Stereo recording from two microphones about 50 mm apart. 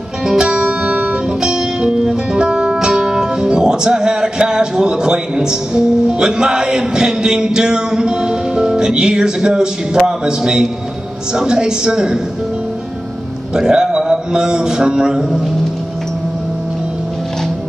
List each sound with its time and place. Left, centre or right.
0.2 s music: centre
10.0 s a woman's voice: centre
13.6 s a man's voice: centre